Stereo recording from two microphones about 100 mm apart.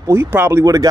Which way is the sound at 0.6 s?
35° right (ahead or behind).